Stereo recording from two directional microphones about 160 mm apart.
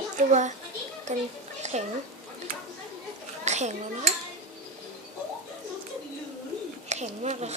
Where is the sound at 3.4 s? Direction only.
45° right (ahead or behind).